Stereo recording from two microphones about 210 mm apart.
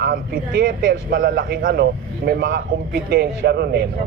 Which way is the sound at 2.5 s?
45° right (ahead or behind).